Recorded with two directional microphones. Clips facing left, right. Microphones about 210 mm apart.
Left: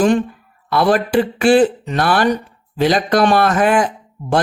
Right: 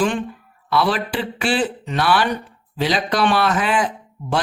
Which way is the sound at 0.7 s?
50° left (ahead or behind).